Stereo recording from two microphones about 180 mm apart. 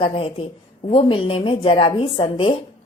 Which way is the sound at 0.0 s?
30° left (ahead or behind).